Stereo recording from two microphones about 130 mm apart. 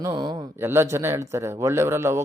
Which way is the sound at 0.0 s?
35° right (ahead or behind).